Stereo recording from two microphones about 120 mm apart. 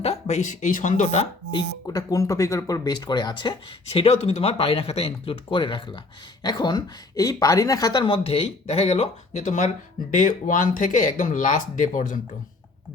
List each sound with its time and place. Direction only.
0.0 s speech: 65° left (ahead or behind)
1.5 s speech: 35° left (ahead or behind)
3.9 s speech: 55° left (ahead or behind); by 12.2 s 90° left